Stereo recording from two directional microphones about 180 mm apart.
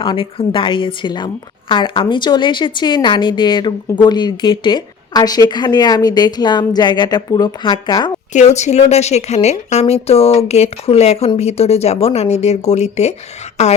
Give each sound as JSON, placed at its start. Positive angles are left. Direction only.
{"t": 0.0, "sound": "a woman's voice", "side_deg": 30}
{"t": 8.3, "sound": "speech", "side_deg": 40}